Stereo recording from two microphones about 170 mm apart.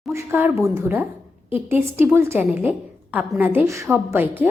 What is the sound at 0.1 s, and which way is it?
A woman's voice, 15° right (ahead or behind).